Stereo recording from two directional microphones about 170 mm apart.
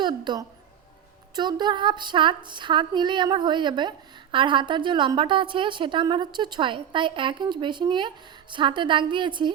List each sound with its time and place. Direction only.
0.0 s a woman's voice: 25° right (ahead or behind)